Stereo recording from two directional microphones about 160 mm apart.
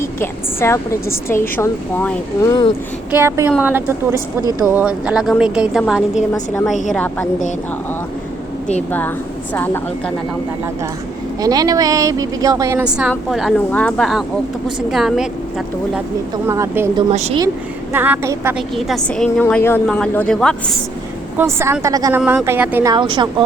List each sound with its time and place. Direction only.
0.2 s a woman's voice: 15° left (ahead or behind)
3.1 s a woman's voice: 15° right (ahead or behind)
6.3 s a woman's voice: 20° left (ahead or behind)
8.9 s speech: 10° left (ahead or behind)
11.3 s a woman's voice: 25° right (ahead or behind)
12.8 s a woman's voice: 5° right (ahead or behind)
13.7 s a woman's voice: 10° left (ahead or behind)
16.5 s a woman's voice: 15° right (ahead or behind)
17.1 s speech: 40° right (ahead or behind)
17.9 s a woman's voice: 10° right (ahead or behind)
18.5 s a woman's voice: centre (ahead or behind)
21.3 s a woman's voice: 15° right (ahead or behind)
22.9 s a woman's voice: 30° right (ahead or behind)